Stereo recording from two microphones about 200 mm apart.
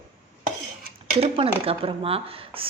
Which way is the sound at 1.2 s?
30° right (ahead or behind).